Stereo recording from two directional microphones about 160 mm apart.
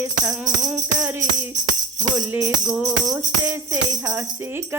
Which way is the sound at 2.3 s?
10° right (ahead or behind).